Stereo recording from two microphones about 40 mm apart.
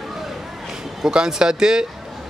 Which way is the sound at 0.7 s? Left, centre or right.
Centre.